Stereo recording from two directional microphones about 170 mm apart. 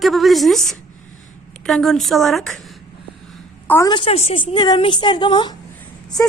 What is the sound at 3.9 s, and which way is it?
A woman's voice, 35° left (ahead or behind).